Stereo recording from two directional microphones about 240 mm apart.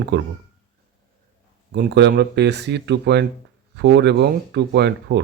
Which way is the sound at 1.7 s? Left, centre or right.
Right.